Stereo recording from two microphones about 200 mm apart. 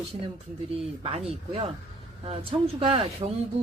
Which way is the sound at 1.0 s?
25° right (ahead or behind).